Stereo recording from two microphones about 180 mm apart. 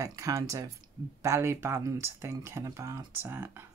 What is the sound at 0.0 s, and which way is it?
Speech, 20° right (ahead or behind).